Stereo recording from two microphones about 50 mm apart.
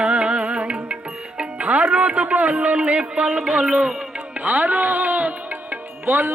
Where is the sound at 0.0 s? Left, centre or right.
Right.